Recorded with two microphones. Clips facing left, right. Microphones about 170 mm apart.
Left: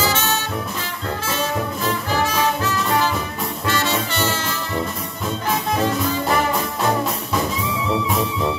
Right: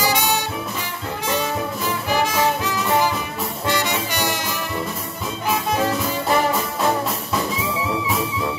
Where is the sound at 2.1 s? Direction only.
15° right (ahead or behind).